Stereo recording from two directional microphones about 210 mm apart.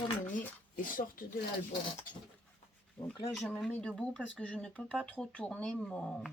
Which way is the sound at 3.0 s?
5° left (ahead or behind).